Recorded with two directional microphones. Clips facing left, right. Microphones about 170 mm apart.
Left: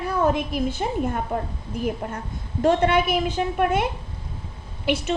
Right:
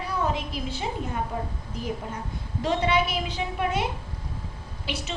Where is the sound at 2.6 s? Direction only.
55° left (ahead or behind).